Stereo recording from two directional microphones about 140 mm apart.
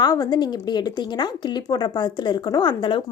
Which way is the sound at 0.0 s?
30° left (ahead or behind).